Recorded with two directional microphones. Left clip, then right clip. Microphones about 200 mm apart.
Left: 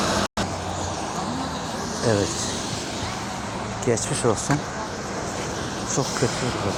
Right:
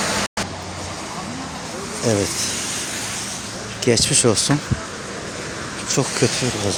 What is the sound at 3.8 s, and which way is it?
Speech, 65° right (ahead or behind).